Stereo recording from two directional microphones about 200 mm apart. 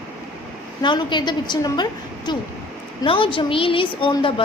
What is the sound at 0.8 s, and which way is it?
A woman's voice, 25° left (ahead or behind).